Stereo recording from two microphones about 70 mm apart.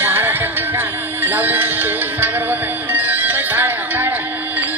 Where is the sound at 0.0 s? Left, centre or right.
Right.